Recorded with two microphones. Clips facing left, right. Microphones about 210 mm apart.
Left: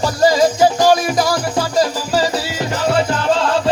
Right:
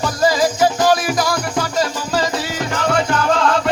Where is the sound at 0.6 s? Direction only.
25° left (ahead or behind).